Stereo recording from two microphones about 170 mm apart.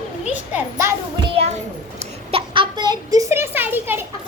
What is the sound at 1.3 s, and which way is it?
Children playing, 35° right (ahead or behind).